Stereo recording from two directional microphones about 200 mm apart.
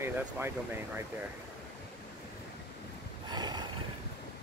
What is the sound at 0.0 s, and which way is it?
Speech, 10° right (ahead or behind).